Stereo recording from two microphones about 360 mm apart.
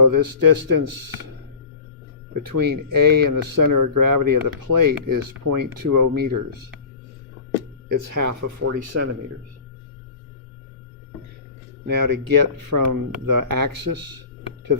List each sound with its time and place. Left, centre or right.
0.0 s speech: right
2.6 s speech: right
7.9 s speech: right
11.9 s speech: right